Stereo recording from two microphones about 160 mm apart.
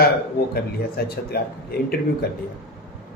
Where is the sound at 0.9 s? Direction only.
75° left (ahead or behind).